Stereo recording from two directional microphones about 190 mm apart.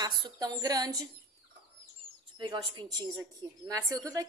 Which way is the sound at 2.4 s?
25° right (ahead or behind).